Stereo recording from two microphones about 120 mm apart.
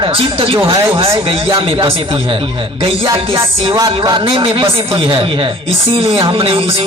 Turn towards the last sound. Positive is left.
turn(degrees=-50)  # may be behind; listen again after turning